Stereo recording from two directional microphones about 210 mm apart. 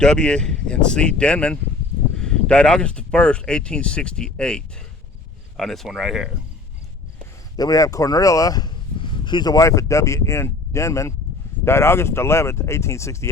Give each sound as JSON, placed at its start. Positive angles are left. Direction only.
{"t": 0.0, "sound": "speech", "side_deg": 5}
{"t": 7.5, "sound": "speech", "side_deg": 20}